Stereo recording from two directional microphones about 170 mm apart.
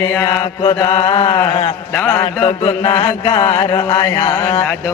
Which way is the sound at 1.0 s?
30° left (ahead or behind).